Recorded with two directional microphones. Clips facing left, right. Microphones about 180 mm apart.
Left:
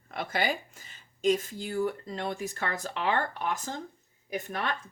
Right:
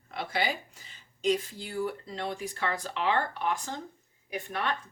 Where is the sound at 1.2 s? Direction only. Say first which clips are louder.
Left 2 dB; 45° left (ahead or behind).